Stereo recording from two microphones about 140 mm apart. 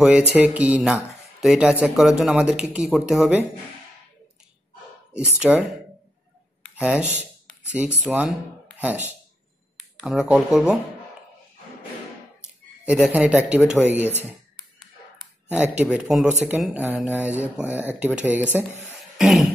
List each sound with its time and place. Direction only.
0.3 s speech: 10° right (ahead or behind)
5.4 s speech: 5° right (ahead or behind)
6.7 s speech: 10° right (ahead or behind)
7.2 s a sound: 15° left (ahead or behind)
7.7 s speech: 10° right (ahead or behind)
9.8 s speech: centre (ahead or behind)
12.8 s speech: 5° right (ahead or behind)
15.5 s speech: 10° right (ahead or behind)
19.1 s cough: centre (ahead or behind)